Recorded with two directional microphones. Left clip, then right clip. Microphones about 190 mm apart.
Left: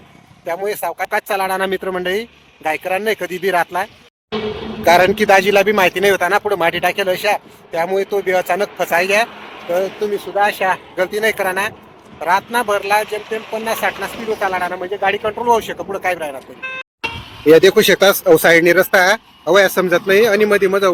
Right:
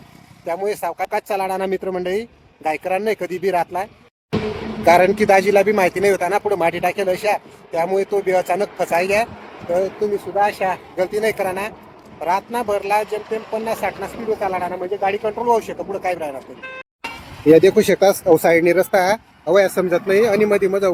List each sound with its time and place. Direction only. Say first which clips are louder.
0.4 s speech: left 1 dB; centre (ahead or behind)
4.3 s a sound: left 1 dB; 25° right (ahead or behind)
4.9 s speech: left 2 dB; centre (ahead or behind)
10.3 s speech: left 4 dB; centre (ahead or behind)
16.6 s speech: left 6 dB; 20° right (ahead or behind)
17.4 s speech: left 3 dB; centre (ahead or behind)